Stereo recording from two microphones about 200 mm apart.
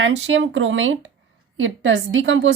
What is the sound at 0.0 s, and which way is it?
A woman's voice, 70° right (ahead or behind).